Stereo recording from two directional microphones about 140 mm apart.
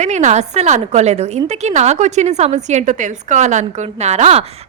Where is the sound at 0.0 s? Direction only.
60° right (ahead or behind).